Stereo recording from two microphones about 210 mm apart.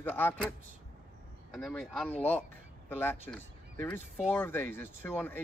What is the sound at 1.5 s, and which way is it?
Speech, 5° left (ahead or behind).